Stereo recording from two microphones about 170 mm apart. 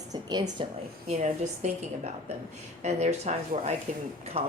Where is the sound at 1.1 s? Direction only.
45° right (ahead or behind).